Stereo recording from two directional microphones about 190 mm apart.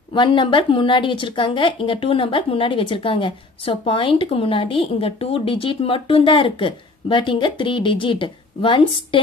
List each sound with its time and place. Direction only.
0.1 s a woman's voice: 25° left (ahead or behind)